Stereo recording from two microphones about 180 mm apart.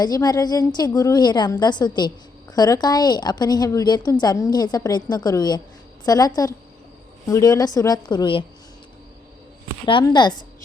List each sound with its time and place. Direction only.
0.0 s a woman's voice: 20° left (ahead or behind)
9.8 s a woman's voice: 25° left (ahead or behind)